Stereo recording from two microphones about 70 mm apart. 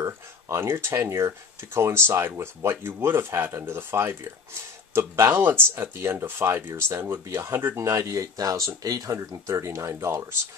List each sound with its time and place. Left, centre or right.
0.0 s speech: right